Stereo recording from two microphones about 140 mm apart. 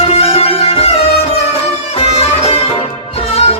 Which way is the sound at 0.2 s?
45° left (ahead or behind).